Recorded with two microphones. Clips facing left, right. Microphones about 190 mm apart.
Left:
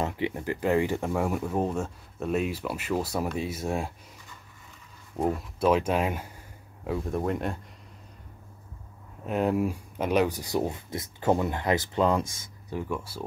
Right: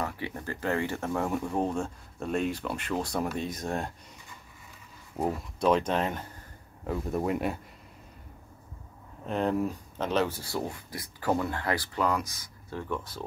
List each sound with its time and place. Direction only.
0.0 s speech: 20° left (ahead or behind)
5.1 s speech: centre (ahead or behind)
6.9 s speech: centre (ahead or behind)
9.2 s speech: 10° left (ahead or behind)